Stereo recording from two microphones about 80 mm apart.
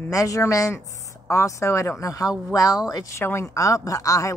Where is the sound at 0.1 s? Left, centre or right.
Left.